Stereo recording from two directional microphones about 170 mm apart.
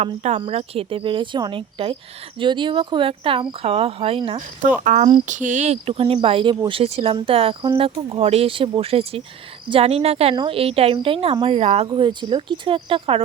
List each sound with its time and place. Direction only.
0.0 s speech: 40° right (ahead or behind)
4.6 s cricket: 50° right (ahead or behind)
5.2 s speech: 45° right (ahead or behind); by 13.2 s 30° right (ahead or behind)